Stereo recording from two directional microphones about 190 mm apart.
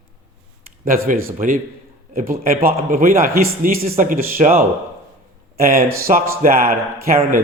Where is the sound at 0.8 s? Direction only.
45° right (ahead or behind).